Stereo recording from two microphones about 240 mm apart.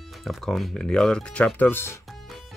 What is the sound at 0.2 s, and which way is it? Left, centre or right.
Speech, centre.